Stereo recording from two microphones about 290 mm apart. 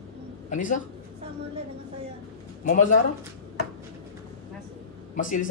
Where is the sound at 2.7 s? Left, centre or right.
Left.